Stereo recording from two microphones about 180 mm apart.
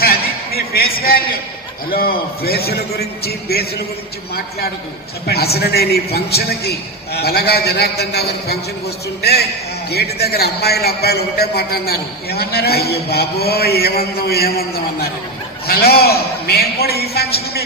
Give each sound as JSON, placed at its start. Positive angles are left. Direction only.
{"t": 0.0, "sound": "a sound", "side_deg": 60}
{"t": 0.9, "sound": "a man's voice", "side_deg": 55}
{"t": 5.2, "sound": "a man's voice", "side_deg": 60}
{"t": 15.6, "sound": "a man's voice", "side_deg": 60}